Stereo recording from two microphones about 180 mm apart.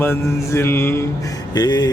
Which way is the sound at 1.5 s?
25° left (ahead or behind).